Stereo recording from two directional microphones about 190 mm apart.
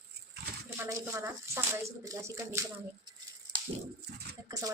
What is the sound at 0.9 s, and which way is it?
Speech, 15° right (ahead or behind).